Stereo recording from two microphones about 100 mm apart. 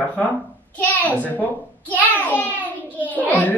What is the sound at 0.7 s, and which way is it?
A child's voice, 15° left (ahead or behind).